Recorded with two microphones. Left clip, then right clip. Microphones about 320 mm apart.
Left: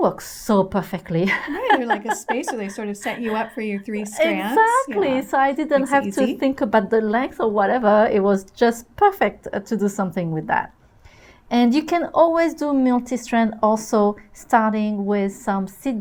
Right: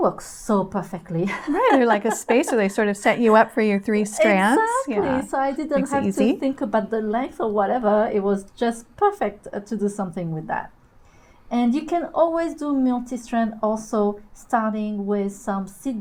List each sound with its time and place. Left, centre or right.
0.0 s speech: left
1.8 s speech: right
4.5 s speech: left